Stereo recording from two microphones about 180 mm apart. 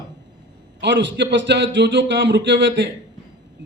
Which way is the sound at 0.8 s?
80° right.